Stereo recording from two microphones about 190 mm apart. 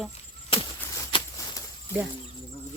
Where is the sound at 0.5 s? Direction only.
30° left (ahead or behind).